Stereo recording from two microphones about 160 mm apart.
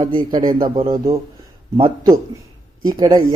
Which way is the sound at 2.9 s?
25° right (ahead or behind).